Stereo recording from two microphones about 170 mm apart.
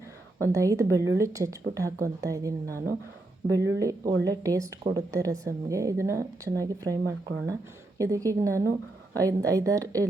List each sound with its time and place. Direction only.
0.4 s a woman's voice: 20° right (ahead or behind)